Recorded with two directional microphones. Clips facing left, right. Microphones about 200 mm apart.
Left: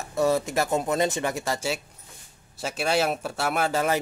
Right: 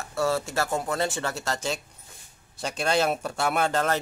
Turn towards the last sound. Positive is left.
turn(degrees=10)  # may be behind; listen again after turning